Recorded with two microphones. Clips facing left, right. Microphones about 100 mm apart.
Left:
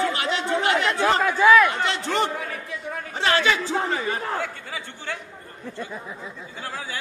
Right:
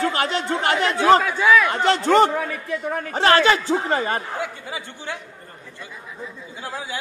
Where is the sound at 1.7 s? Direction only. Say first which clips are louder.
Right 8 dB; 50° right (ahead or behind).